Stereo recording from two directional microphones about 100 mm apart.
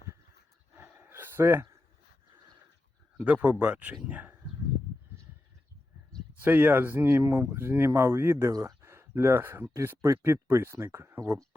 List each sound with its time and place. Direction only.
0.8 s a sound: 25° right (ahead or behind)
3.2 s speech: 15° right (ahead or behind)
6.4 s speech: 20° right (ahead or behind)